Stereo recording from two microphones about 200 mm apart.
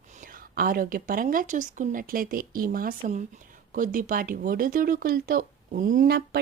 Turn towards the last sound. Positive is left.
turn(degrees=-45)  # may be behind; listen again after turning